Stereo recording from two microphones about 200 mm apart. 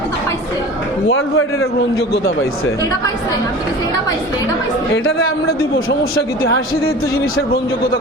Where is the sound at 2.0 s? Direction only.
55° left (ahead or behind).